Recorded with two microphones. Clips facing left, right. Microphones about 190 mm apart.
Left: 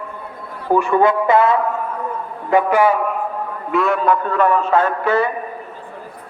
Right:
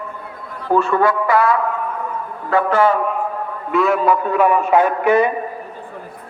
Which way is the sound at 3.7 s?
Centre (ahead or behind).